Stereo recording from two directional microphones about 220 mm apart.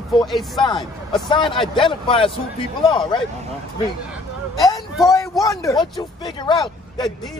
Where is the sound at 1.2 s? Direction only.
20° left (ahead or behind).